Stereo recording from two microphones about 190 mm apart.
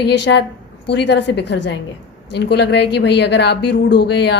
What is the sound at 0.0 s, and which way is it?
A woman's voice, 65° left (ahead or behind).